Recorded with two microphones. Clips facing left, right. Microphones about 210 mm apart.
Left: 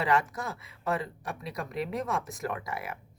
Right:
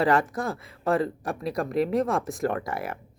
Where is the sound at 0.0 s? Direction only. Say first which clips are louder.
Right 5 dB; 35° right (ahead or behind).